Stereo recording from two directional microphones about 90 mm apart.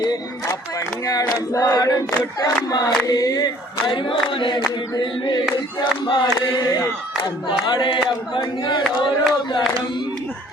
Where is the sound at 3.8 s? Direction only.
70° left (ahead or behind).